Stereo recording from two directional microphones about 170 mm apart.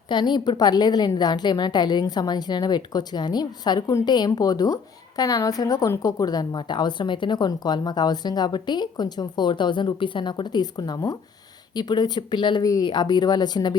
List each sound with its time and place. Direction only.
0.1 s a woman's voice: 25° left (ahead or behind)